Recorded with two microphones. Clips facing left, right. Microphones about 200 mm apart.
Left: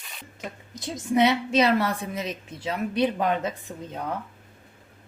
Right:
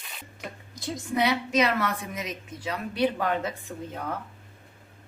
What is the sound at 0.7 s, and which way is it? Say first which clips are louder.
A woman's voice: left 5 dB; 20° left (ahead or behind).